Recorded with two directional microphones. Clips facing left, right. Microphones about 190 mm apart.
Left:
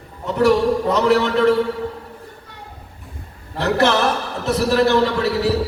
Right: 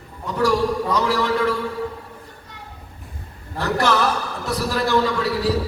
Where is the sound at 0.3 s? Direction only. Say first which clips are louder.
Left 4 dB; 25° left (ahead or behind).